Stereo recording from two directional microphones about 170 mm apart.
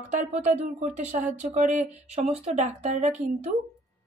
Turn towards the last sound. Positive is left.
turn(degrees=-45)  # may be behind; listen again after turning